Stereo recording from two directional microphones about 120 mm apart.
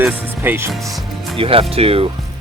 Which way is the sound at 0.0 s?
20° right (ahead or behind).